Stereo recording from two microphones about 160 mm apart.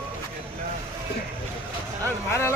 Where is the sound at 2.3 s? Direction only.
15° left (ahead or behind).